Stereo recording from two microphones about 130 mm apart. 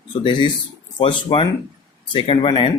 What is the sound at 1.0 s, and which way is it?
Speech, 40° left (ahead or behind).